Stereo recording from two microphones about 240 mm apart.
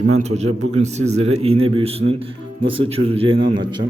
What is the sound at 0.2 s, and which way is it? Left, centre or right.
A man's voice, right.